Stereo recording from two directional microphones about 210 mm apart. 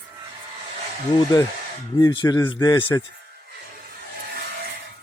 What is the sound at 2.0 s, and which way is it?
A man's voice, 20° left (ahead or behind).